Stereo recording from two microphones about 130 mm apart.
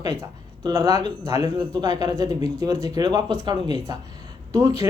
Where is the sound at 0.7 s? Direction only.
25° right (ahead or behind).